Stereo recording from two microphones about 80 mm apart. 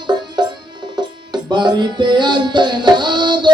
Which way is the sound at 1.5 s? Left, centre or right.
Right.